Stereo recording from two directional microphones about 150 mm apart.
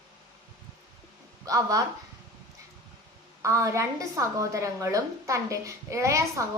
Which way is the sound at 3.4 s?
20° right (ahead or behind).